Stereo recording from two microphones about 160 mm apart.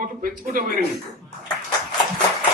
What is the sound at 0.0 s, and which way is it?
Speech, 60° right (ahead or behind).